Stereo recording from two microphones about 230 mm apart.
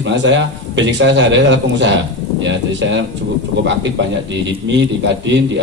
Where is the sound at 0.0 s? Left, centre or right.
Right.